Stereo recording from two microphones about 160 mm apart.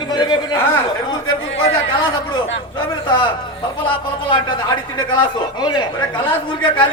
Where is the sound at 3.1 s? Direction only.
30° left (ahead or behind).